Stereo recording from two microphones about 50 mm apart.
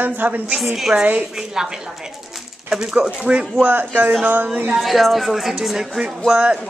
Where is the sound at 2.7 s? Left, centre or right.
Centre.